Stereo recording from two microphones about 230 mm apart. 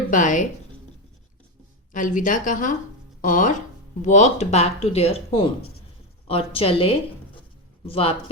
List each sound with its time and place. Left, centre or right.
0.1 s speech: left
1.9 s speech: left